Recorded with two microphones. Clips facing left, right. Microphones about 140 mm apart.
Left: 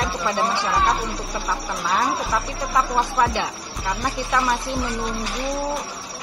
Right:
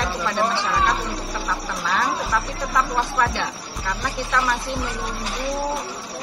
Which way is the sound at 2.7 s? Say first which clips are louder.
Left 1 dB; 10° left (ahead or behind).